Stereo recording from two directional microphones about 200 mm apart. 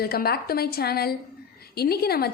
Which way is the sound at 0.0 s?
50° left (ahead or behind).